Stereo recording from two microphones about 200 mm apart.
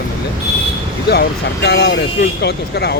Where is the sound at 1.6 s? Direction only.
55° left (ahead or behind).